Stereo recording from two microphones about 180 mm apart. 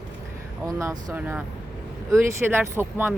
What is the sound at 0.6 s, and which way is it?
Speech, 20° right (ahead or behind).